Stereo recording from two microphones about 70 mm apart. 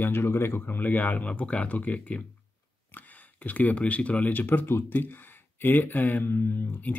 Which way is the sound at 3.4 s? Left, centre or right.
Left.